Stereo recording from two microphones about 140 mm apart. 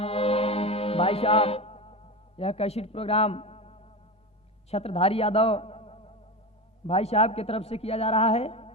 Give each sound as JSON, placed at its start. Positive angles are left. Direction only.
{"t": 0.0, "sound": "music", "side_deg": 45}
{"t": 4.7, "sound": "a man's voice", "side_deg": 45}